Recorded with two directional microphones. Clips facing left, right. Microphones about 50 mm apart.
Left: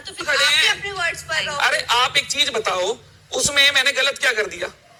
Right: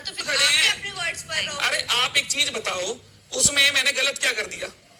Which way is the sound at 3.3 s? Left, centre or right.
Left.